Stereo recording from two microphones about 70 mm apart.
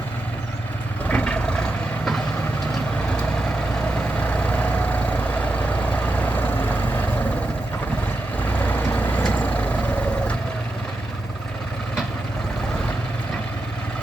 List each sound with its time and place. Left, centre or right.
1.0 s vehicle: centre
3.9 s vehicle: centre
8.5 s vehicle: left